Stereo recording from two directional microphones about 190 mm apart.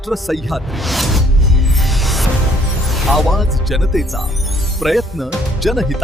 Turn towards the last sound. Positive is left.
turn(degrees=0)  # may be behind; listen again after turning